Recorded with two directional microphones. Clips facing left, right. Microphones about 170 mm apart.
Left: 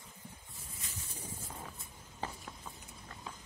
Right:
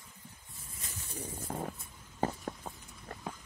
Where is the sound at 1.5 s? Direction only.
50° right (ahead or behind).